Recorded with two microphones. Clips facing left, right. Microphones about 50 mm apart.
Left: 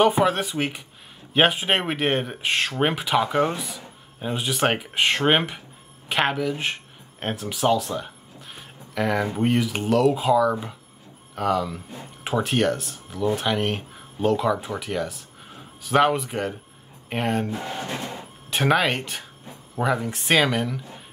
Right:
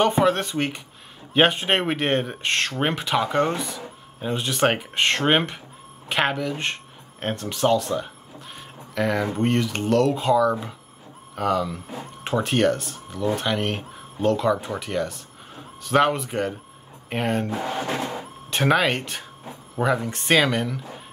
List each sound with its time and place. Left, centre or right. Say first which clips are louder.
0.0 s speech: even; centre
17.5 s speech: right 3 dB; right
18.5 s speech: right 1 dB; centre